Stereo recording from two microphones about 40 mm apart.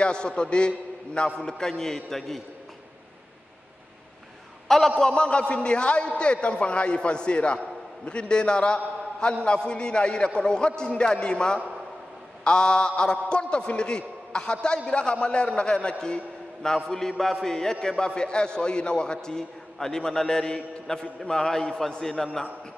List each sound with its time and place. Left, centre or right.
0.0 s a man's voice: left; by 2.4 s centre
4.6 s a man's voice: centre
4.9 s a man's voice: left